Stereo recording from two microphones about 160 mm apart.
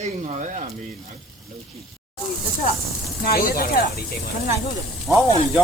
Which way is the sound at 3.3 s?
65° left (ahead or behind).